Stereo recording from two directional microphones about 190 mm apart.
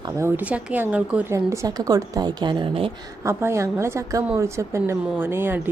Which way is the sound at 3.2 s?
15° right (ahead or behind).